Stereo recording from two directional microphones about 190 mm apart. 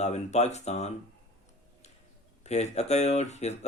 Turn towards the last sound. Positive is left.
turn(degrees=35)  # may be behind; listen again after turning